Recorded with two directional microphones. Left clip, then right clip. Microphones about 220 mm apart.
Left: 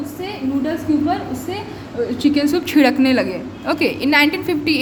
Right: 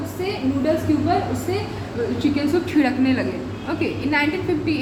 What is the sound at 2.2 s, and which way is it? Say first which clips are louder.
A woman's voice: left 4 dB; 45° left (ahead or behind).